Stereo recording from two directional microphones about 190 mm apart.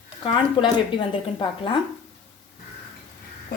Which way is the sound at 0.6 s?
25° left (ahead or behind).